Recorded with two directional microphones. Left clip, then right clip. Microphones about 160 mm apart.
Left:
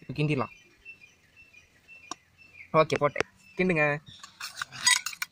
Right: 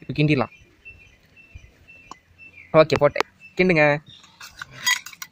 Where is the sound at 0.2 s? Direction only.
15° right (ahead or behind).